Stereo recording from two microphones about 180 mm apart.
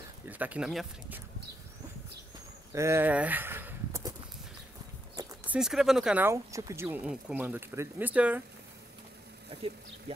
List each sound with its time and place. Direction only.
0.3 s speech: 10° right (ahead or behind)
2.7 s a sound: 15° right (ahead or behind)
5.4 s speech: 5° right (ahead or behind)
9.5 s speech: 30° right (ahead or behind)